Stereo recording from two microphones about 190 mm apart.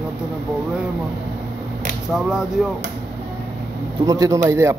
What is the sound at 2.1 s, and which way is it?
Speech, 5° right (ahead or behind).